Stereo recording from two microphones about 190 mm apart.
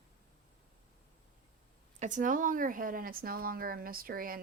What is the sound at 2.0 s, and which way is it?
A woman's voice, 40° right (ahead or behind).